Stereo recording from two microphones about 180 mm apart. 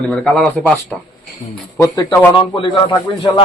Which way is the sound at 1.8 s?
15° left (ahead or behind).